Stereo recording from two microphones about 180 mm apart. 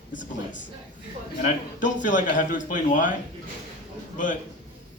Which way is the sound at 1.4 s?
45° left (ahead or behind).